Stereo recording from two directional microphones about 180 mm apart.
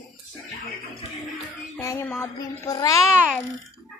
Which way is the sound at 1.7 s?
15° left (ahead or behind).